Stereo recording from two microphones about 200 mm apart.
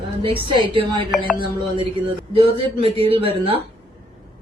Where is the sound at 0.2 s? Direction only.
25° right (ahead or behind).